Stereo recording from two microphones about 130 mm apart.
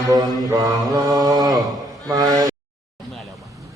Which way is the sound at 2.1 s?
30° right (ahead or behind).